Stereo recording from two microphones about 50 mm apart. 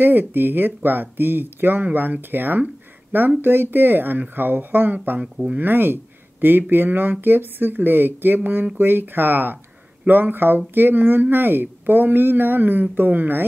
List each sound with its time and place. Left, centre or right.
0.0 s speech: right
5.2 s speech: right
5.6 s speech: right